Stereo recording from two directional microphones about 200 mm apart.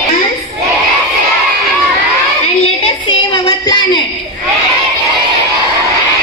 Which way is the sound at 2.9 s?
25° left (ahead or behind).